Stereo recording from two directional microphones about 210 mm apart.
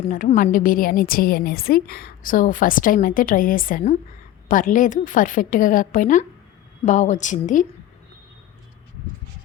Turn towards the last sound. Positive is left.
turn(degrees=35)  # may be behind; listen again after turning